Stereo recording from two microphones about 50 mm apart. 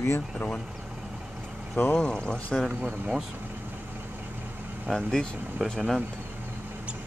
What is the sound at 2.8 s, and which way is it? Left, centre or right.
Speech, centre.